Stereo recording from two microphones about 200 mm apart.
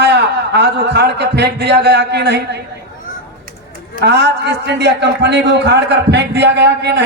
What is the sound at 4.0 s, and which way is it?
A man's voice, 55° right (ahead or behind).